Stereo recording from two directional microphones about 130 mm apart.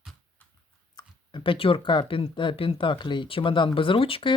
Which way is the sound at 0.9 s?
40° left (ahead or behind).